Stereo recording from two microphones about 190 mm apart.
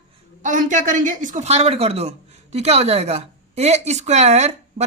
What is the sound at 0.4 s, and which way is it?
A woman's voice, 40° right (ahead or behind).